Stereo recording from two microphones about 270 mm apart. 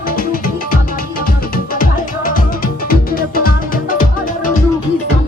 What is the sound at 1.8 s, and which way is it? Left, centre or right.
Music, left.